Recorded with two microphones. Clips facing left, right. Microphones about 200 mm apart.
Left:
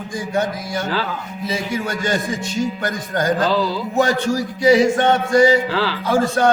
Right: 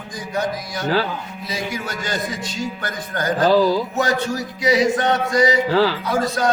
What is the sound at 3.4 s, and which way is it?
Carnatic music, 45° right (ahead or behind).